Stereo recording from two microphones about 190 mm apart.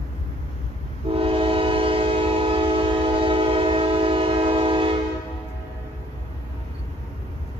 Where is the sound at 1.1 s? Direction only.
30° right (ahead or behind).